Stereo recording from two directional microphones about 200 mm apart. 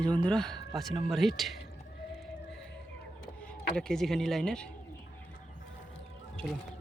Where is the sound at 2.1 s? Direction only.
5° left (ahead or behind).